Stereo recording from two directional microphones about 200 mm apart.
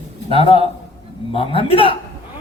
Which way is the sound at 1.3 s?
25° left (ahead or behind).